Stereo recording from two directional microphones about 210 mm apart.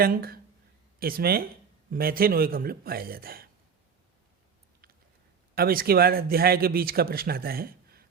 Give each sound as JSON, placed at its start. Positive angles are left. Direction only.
{"t": 0.0, "sound": "speech", "side_deg": -45}
{"t": 5.5, "sound": "speech", "side_deg": -45}